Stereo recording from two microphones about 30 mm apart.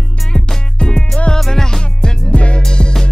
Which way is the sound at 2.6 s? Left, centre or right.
Left.